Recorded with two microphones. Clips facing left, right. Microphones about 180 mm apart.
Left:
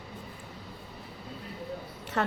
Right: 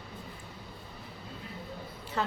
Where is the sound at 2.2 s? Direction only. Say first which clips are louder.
Left 3 dB; 75° left (ahead or behind).